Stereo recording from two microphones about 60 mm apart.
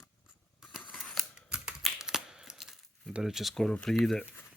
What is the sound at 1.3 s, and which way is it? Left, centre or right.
Typing, centre.